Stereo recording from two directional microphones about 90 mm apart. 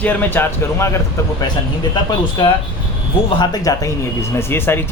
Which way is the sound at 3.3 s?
45° left (ahead or behind).